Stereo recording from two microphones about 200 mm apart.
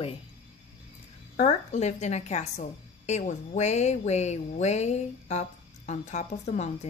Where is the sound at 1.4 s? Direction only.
35° left (ahead or behind).